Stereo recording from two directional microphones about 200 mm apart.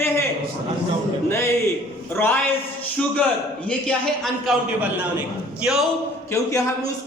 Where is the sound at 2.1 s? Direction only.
10° left (ahead or behind).